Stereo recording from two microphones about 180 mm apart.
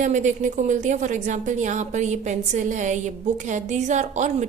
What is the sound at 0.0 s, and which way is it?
A woman's voice, 45° right (ahead or behind).